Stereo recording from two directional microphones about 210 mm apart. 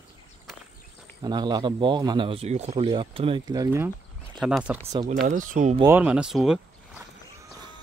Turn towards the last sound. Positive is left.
turn(degrees=0)  # may be behind; listen again after turning